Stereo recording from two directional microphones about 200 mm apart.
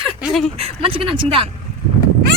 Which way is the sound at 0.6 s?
25° right (ahead or behind).